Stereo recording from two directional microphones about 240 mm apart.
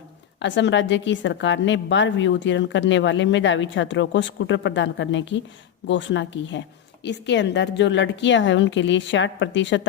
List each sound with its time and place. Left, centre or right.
0.3 s a woman's voice: left